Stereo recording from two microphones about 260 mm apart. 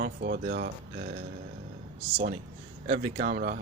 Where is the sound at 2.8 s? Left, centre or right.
Right.